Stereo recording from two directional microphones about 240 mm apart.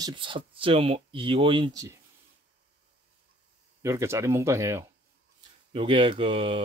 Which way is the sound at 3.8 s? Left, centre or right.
Centre.